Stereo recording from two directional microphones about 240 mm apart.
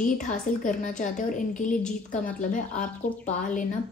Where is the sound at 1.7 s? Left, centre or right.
Centre.